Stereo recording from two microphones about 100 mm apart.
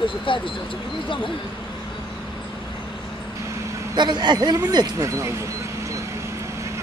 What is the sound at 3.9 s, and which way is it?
Speech, 45° right (ahead or behind).